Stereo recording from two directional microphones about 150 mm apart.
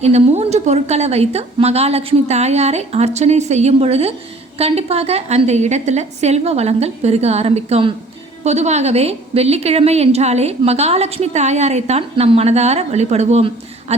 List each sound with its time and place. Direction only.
0.0 s a woman's voice: 45° right (ahead or behind)